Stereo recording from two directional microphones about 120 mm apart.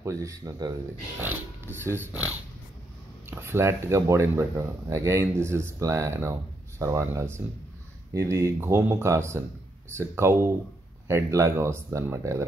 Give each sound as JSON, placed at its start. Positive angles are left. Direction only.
{"t": 0.0, "sound": "speech", "side_deg": -25}
{"t": 1.8, "sound": "speech", "side_deg": -20}
{"t": 3.3, "sound": "speech", "side_deg": -20}